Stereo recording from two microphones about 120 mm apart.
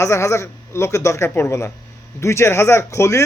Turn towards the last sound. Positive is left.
turn(degrees=25)  # may be behind; listen again after turning